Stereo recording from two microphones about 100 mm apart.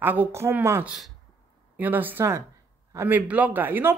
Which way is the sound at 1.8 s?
20° right (ahead or behind).